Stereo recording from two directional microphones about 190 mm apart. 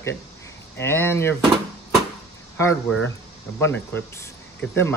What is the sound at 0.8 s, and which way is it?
Speech, 10° left (ahead or behind).